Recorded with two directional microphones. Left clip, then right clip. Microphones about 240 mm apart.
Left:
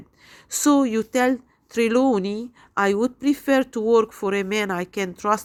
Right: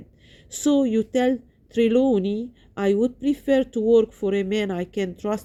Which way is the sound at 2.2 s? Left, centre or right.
Left.